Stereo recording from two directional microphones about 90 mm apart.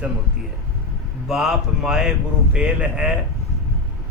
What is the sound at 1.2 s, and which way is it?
Speech, 5° right (ahead or behind).